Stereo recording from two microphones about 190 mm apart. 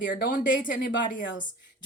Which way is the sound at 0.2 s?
45° left (ahead or behind).